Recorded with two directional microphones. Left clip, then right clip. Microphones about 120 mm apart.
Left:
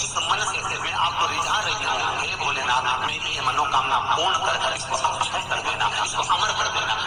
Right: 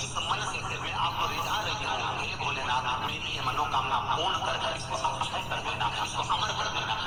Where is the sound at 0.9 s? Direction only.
40° left (ahead or behind).